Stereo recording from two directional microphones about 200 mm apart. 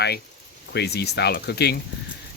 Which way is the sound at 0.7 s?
55° left (ahead or behind).